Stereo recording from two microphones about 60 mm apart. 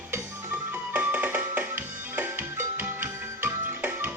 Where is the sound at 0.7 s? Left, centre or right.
Right.